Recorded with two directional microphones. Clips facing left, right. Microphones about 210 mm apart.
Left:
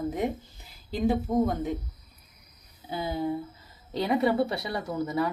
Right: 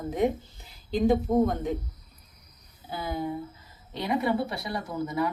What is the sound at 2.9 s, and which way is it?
A woman's voice, 25° left (ahead or behind).